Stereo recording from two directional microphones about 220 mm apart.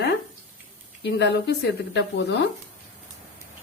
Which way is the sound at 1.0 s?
50° left (ahead or behind).